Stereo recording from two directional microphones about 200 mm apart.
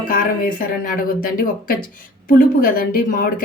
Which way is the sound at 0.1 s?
45° left (ahead or behind).